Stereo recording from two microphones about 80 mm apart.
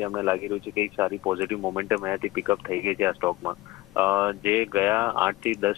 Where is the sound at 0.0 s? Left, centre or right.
Right.